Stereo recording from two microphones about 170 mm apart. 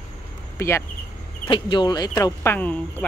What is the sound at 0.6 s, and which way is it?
Speech, 15° left (ahead or behind).